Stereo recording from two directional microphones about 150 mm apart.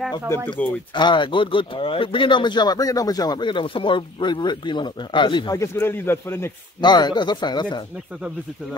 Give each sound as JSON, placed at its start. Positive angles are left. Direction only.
{"t": 0.5, "sound": "speech", "side_deg": 10}
{"t": 0.9, "sound": "speech", "side_deg": 30}
{"t": 5.6, "sound": "speech", "side_deg": 15}
{"t": 6.8, "sound": "speech", "side_deg": 30}